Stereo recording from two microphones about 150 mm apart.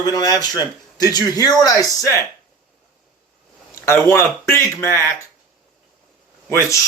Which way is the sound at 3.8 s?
15° left (ahead or behind).